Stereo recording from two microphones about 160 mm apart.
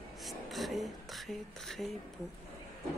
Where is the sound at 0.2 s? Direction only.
Centre (ahead or behind).